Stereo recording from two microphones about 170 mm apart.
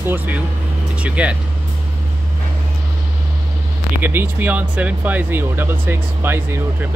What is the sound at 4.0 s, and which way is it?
Speech, 10° right (ahead or behind).